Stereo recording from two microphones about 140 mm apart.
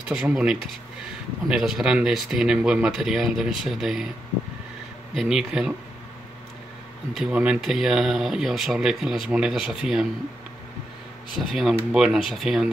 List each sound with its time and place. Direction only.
0.1 s speech: 10° right (ahead or behind)
5.1 s speech: 5° right (ahead or behind)
7.2 s speech: 5° right (ahead or behind)
11.3 s speech: centre (ahead or behind)